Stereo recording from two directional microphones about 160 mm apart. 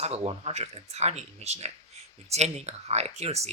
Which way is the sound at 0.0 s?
40° right (ahead or behind).